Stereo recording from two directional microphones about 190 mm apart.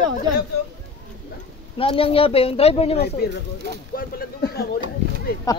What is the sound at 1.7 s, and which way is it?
Speech, 30° left (ahead or behind).